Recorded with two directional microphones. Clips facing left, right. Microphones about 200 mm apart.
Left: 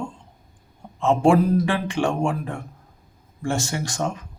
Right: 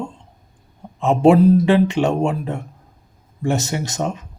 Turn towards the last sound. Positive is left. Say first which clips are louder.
# right 3 dB
turn(degrees=-20)  # may be behind; listen again after turning